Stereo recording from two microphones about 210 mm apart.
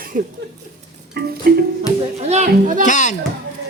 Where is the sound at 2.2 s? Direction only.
35° right (ahead or behind).